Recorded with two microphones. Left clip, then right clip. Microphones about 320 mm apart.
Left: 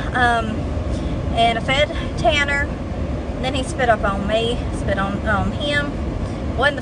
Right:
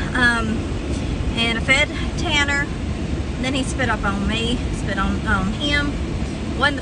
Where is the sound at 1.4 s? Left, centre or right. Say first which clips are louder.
Left 1 dB; centre.